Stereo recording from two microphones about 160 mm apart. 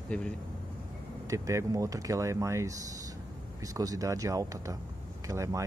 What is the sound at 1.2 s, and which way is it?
Speech, 20° right (ahead or behind).